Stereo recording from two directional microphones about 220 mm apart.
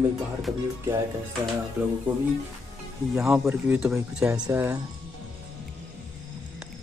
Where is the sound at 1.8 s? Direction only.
10° right (ahead or behind).